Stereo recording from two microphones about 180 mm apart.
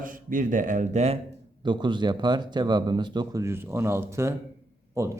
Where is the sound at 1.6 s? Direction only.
25° right (ahead or behind).